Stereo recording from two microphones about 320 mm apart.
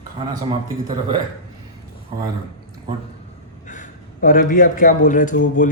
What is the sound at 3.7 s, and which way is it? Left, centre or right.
A man's voice, left.